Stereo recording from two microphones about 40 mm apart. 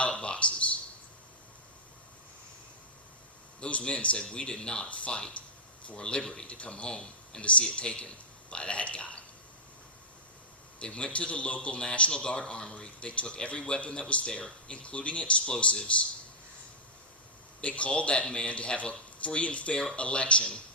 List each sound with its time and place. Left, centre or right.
0.0 s a sound: left
3.6 s a man's voice: left
4.9 s a man's voice: left
6.0 s a man's voice: left
6.5 s a man's voice: left
6.8 s speech: centre
7.4 s a man's voice: left
10.8 s a man's voice: left
17.6 s a man's voice: left